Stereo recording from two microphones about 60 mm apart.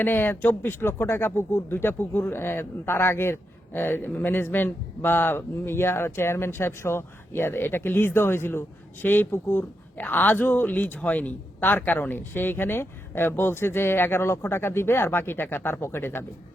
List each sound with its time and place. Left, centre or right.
0.0 s speech: left